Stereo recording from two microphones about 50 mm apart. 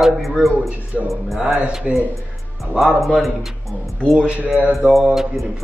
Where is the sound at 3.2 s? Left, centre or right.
Centre.